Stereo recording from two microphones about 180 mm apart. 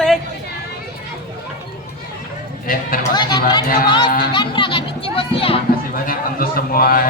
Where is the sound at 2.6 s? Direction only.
50° left (ahead or behind).